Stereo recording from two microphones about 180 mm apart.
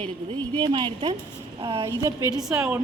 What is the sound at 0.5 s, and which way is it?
Speech, 25° right (ahead or behind).